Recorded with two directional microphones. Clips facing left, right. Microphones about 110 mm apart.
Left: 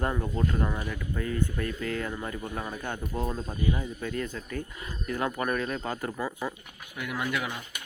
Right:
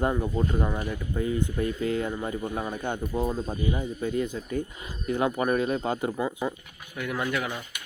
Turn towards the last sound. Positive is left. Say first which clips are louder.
# right 2 dB
turn(degrees=0)  # may be behind; listen again after turning